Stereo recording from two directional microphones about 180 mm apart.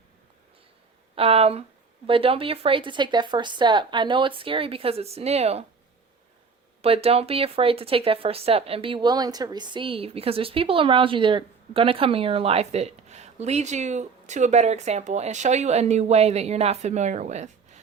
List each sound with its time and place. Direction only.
1.1 s speech: 30° right (ahead or behind)
6.8 s speech: 35° right (ahead or behind)